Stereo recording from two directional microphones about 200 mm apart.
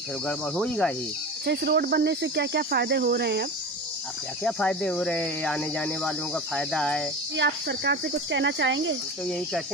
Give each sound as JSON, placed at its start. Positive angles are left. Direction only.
{"t": 0.3, "sound": "speech", "side_deg": 5}
{"t": 1.4, "sound": "speech", "side_deg": -55}
{"t": 4.4, "sound": "speech", "side_deg": 5}
{"t": 7.3, "sound": "speech", "side_deg": -60}